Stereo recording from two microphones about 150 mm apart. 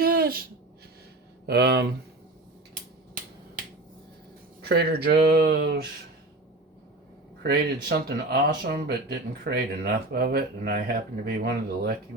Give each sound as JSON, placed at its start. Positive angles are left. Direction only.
{"t": 0.0, "sound": "a sound", "side_deg": -80}
{"t": 1.5, "sound": "speech", "side_deg": -90}
{"t": 4.6, "sound": "speech", "side_deg": -90}
{"t": 7.4, "sound": "speech", "side_deg": -90}